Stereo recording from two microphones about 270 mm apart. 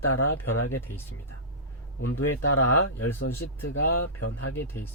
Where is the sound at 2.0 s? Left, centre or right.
Left.